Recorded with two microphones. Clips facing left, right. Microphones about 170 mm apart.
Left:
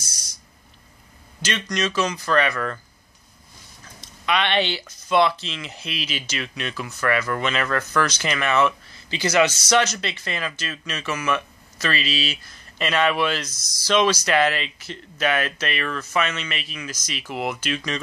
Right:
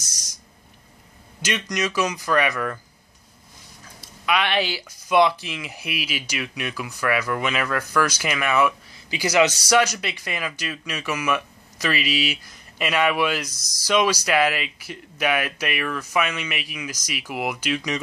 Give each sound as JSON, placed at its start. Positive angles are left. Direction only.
{"t": 1.4, "sound": "speech", "side_deg": -15}
{"t": 4.0, "sound": "speech", "side_deg": -5}
{"t": 13.5, "sound": "speech", "side_deg": -40}
{"t": 13.8, "sound": "speech", "side_deg": -10}